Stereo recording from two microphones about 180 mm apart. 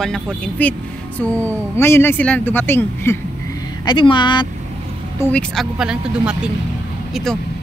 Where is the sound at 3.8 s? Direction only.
25° left (ahead or behind).